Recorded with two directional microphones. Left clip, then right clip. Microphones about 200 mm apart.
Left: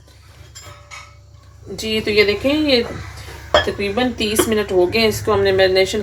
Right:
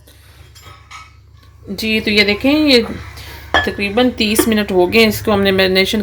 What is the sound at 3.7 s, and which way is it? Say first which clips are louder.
A woman's voice: right 5 dB; 55° right (ahead or behind).